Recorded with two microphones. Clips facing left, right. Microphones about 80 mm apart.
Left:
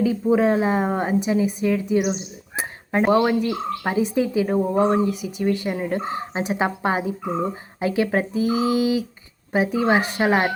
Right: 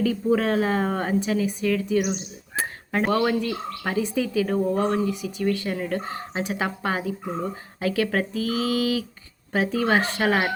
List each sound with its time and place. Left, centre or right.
0.0 s a woman's voice: centre
3.1 s frog: centre